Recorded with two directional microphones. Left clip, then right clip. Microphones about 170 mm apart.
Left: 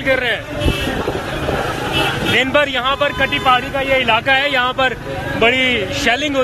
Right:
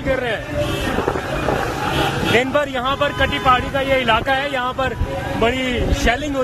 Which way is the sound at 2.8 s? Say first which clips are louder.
Left 2 dB; 20° right (ahead or behind).